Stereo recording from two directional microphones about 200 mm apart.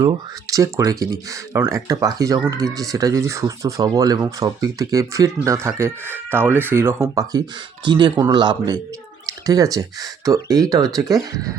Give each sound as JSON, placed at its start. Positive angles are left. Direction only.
{"t": 0.0, "sound": "speech", "side_deg": -15}